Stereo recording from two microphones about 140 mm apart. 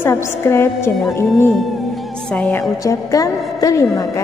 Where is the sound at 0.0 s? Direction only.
20° left (ahead or behind).